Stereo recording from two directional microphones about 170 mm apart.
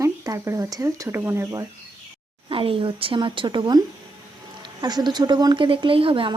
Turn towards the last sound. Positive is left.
turn(degrees=-30)  # may be behind; listen again after turning